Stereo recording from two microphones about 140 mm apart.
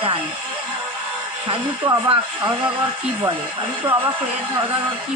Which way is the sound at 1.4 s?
40° right (ahead or behind).